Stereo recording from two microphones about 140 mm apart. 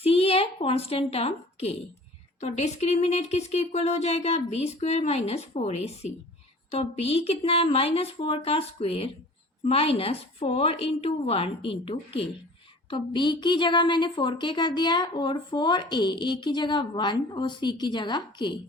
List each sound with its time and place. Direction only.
0.0 s a woman's voice: 45° left (ahead or behind)